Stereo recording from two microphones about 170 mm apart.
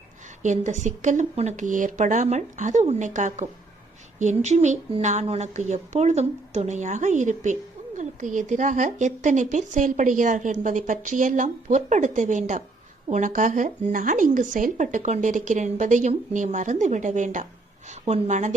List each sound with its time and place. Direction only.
0.4 s a woman's voice: 45° right (ahead or behind)